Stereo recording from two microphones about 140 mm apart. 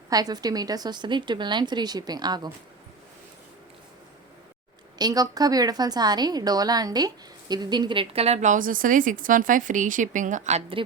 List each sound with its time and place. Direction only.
0.1 s a woman's voice: 30° right (ahead or behind)
4.9 s a woman's voice: 30° right (ahead or behind); by 10.6 s 60° right (ahead or behind)